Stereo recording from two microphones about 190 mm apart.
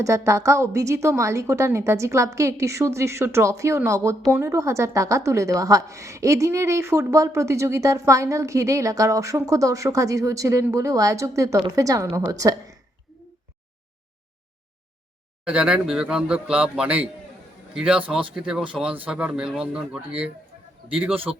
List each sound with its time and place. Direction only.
0.0 s a woman's voice: 15° right (ahead or behind)
15.4 s speech: 5° right (ahead or behind)